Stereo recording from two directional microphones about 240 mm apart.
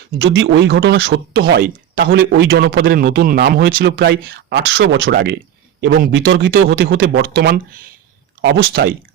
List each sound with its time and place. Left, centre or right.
0.2 s speech: right